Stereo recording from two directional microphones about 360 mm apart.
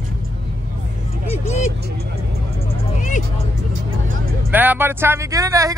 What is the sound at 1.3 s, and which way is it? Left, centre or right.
Vehicle, centre.